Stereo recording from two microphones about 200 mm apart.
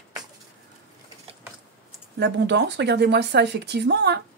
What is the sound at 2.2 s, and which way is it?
Speech, 60° right (ahead or behind).